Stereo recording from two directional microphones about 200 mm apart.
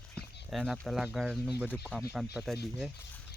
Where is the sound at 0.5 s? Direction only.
Centre (ahead or behind).